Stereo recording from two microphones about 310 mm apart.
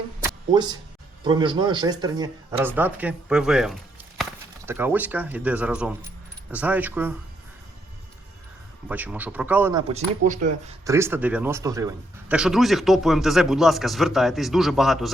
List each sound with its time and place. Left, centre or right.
0.5 s speech: centre
8.9 s speech: centre
9.9 s speech: right
10.8 s speech: centre